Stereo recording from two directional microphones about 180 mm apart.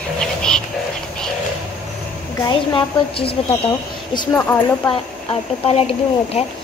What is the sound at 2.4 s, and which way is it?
A woman's voice, 30° left (ahead or behind).